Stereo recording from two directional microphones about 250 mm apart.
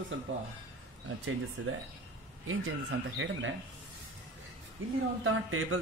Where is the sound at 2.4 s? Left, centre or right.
Right.